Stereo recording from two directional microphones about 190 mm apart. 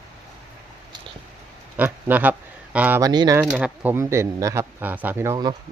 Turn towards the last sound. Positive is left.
turn(degrees=-20)  # may be behind; listen again after turning